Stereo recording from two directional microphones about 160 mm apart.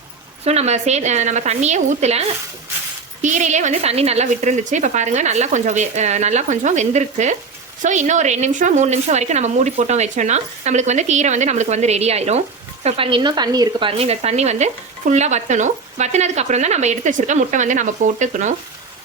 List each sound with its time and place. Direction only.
0.4 s speech: 40° right (ahead or behind)